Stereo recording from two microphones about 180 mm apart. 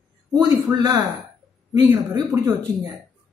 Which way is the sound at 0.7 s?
20° right (ahead or behind).